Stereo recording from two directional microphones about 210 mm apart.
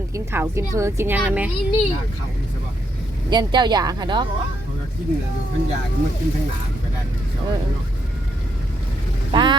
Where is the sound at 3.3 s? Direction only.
20° right (ahead or behind).